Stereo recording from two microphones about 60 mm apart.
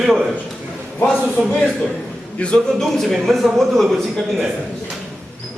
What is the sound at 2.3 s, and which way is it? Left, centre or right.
Speech, centre.